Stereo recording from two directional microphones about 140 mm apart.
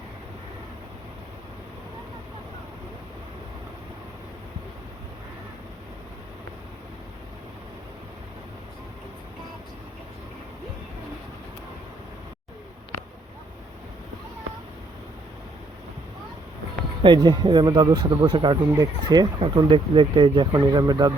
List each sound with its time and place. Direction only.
17.0 s speech: 35° right (ahead or behind)